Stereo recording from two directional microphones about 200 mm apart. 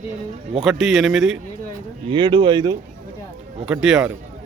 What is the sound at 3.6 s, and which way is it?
Speech, 5° right (ahead or behind).